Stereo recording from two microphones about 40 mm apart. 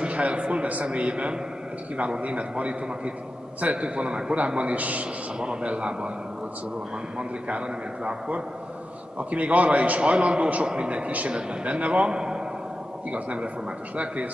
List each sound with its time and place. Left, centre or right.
0.0 s a man's voice: right
5.4 s a man's voice: right
7.2 s a man's voice: right
13.1 s a man's voice: right